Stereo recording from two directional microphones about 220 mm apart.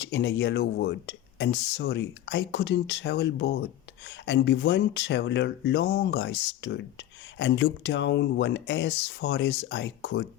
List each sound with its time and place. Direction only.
0.0 s speech: 55° left (ahead or behind)